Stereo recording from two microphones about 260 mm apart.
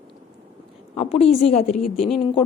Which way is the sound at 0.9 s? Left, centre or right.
Left.